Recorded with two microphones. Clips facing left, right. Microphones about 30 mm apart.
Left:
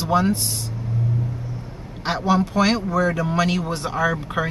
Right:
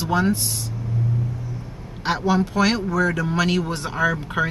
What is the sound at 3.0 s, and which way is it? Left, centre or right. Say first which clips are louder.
Speech: right 1 dB; centre.